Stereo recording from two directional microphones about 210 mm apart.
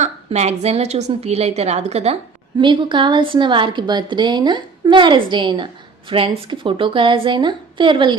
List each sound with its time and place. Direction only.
0.0 s a woman's voice: 30° right (ahead or behind)